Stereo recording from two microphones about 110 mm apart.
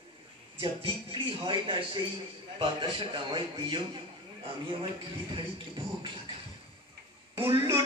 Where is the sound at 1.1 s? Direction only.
50° right (ahead or behind).